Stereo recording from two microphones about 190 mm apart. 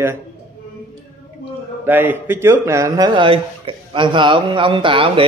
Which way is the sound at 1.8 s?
10° right (ahead or behind).